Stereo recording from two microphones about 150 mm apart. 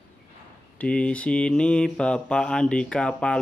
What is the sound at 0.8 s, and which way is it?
Speech, 5° left (ahead or behind).